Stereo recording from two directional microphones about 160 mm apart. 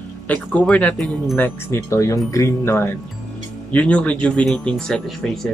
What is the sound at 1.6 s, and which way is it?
Speech, 15° left (ahead or behind).